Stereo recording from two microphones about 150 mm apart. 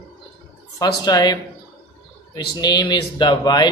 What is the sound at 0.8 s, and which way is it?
Speech, 25° left (ahead or behind).